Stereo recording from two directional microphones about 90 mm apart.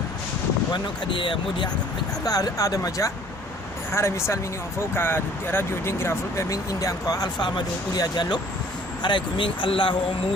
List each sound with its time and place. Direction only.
0.7 s speech: 65° left (ahead or behind)
2.2 s speech: 40° left (ahead or behind)
3.9 s speech: 30° left (ahead or behind); by 9.9 s 70° left (ahead or behind)